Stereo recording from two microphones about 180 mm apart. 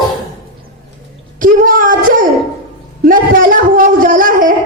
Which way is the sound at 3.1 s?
50° right (ahead or behind).